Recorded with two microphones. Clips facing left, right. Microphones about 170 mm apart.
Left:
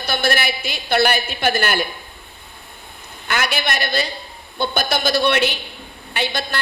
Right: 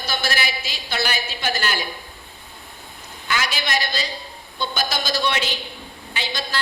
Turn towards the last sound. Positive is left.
turn(degrees=60)  # may be behind; listen again after turning